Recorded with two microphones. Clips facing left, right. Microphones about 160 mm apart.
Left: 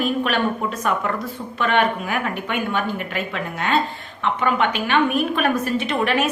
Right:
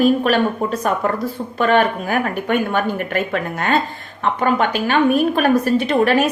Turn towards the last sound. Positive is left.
turn(degrees=-40)  # may be behind; listen again after turning